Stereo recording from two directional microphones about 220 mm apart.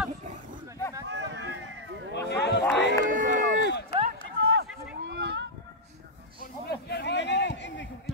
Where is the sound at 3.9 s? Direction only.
45° left (ahead or behind).